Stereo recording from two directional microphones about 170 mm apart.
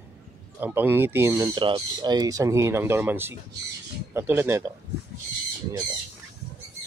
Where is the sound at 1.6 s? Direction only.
25° right (ahead or behind).